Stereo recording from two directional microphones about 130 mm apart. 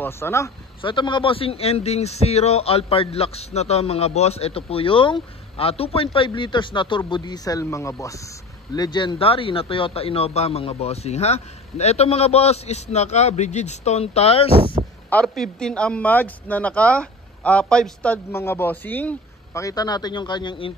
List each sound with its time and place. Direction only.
0.0 s speech: 20° left (ahead or behind)
0.8 s a man's voice: 35° left (ahead or behind)
15.2 s speech: 5° left (ahead or behind)
19.6 s speech: 30° left (ahead or behind)